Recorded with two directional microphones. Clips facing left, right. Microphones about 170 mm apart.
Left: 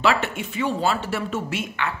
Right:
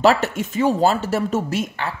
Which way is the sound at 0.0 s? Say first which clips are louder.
Right 5 dB; 40° right (ahead or behind).